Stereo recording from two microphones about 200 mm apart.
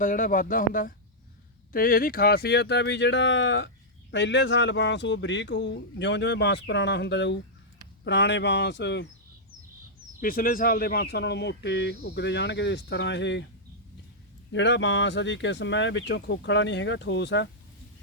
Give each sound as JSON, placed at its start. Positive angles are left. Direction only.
{"t": 0.0, "sound": "speech", "side_deg": 40}
{"t": 10.2, "sound": "speech", "side_deg": 45}
{"t": 14.5, "sound": "speech", "side_deg": 65}